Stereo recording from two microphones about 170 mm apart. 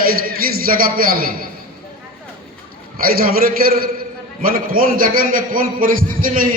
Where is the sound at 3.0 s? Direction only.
60° right (ahead or behind).